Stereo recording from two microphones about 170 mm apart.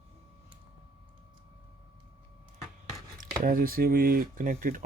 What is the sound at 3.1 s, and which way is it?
Speech, 55° right (ahead or behind).